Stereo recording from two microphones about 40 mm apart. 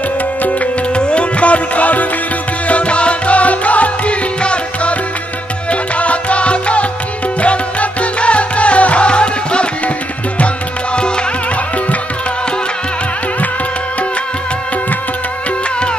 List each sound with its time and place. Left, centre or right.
0.9 s music: left